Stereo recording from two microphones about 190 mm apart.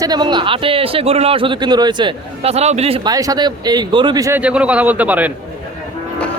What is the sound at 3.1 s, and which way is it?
A man's voice, 20° right (ahead or behind).